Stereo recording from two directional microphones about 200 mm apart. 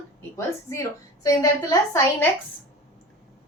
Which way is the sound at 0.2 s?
15° left (ahead or behind).